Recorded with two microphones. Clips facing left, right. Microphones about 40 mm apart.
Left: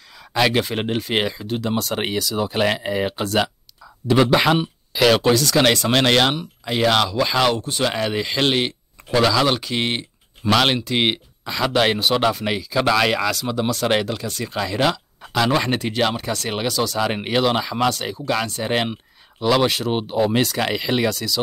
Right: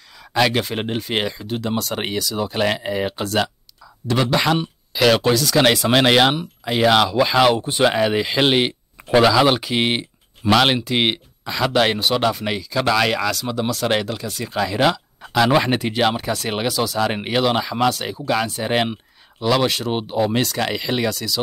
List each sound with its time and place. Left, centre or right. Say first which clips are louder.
0.2 s speech: even; centre
7.6 s speech: right 5 dB; centre
10.4 s speech: right 2 dB; centre